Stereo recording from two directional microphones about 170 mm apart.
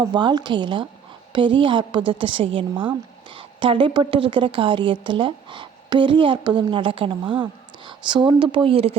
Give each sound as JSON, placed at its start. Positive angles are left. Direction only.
{"t": 0.0, "sound": "a woman's voice", "side_deg": -25}